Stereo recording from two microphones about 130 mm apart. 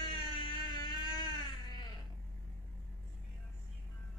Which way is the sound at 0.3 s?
35° left (ahead or behind).